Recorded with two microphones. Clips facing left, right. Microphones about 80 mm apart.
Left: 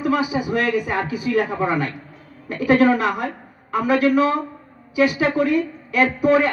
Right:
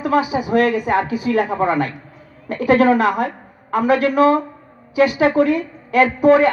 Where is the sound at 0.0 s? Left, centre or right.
Right.